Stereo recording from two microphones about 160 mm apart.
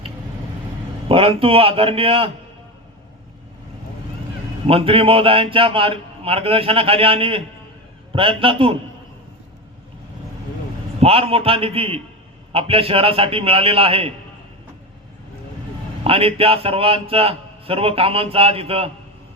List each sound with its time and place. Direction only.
1.0 s a man's voice: 35° right (ahead or behind)
4.6 s a man's voice: 35° right (ahead or behind)
11.0 s a man's voice: 35° right (ahead or behind)
16.0 s a man's voice: 35° right (ahead or behind)